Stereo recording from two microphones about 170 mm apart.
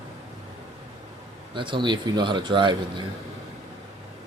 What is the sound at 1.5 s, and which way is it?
Speech, 30° right (ahead or behind).